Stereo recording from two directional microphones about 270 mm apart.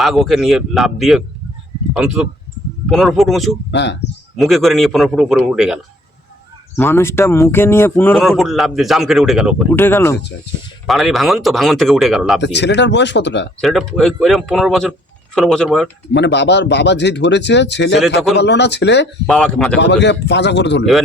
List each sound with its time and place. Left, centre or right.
0.0 s speech: centre
3.7 s speech: left
4.4 s speech: centre
6.7 s speech: centre
12.4 s speech: left
13.6 s speech: centre
16.1 s speech: left
19.2 s speech: centre
19.8 s speech: left